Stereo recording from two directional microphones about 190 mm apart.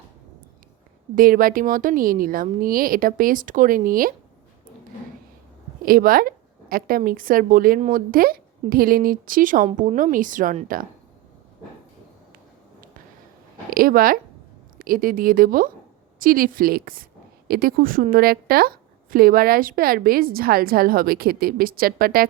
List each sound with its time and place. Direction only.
1.1 s a woman's voice: 50° right (ahead or behind)
5.8 s a woman's voice: 50° right (ahead or behind)
13.7 s a woman's voice: 50° right (ahead or behind)